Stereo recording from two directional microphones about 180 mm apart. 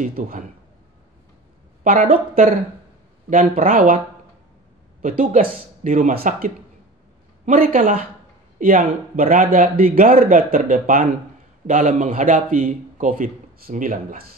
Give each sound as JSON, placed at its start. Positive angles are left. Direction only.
{"t": 0.0, "sound": "a man's voice", "side_deg": -50}
{"t": 1.9, "sound": "a man's voice", "side_deg": -50}
{"t": 5.0, "sound": "a man's voice", "side_deg": -50}